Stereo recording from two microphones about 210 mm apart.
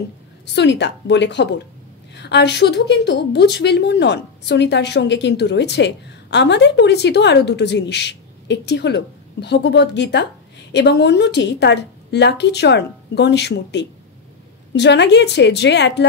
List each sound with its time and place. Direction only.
0.6 s a woman's voice: 55° left (ahead or behind)